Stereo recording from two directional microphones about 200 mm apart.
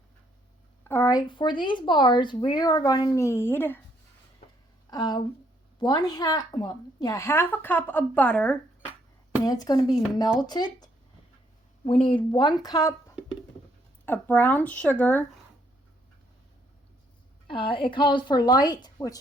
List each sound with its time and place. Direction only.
0.9 s speech: 15° left (ahead or behind)
4.9 s a woman's voice: 20° left (ahead or behind)
9.4 s speech: 20° left (ahead or behind)
11.9 s a woman's voice: 25° left (ahead or behind); by 15.2 s 10° left (ahead or behind)
17.5 s speech: 25° left (ahead or behind)